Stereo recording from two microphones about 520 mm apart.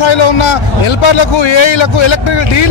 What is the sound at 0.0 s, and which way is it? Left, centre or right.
A man's voice, left.